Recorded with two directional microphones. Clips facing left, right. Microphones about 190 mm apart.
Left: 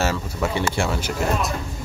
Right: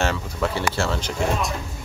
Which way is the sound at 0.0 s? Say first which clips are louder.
Even; 5° left (ahead or behind).